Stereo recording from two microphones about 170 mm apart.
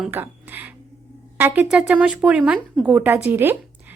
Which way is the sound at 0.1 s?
10° right (ahead or behind).